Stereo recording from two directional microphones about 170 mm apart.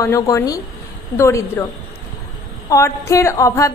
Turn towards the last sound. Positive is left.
turn(degrees=20)  # may be behind; listen again after turning